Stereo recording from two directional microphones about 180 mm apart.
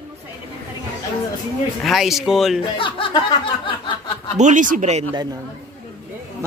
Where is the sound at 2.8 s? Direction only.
30° left (ahead or behind).